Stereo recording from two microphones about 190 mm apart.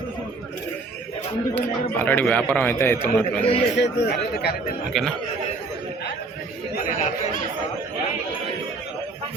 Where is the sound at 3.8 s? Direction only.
60° left (ahead or behind).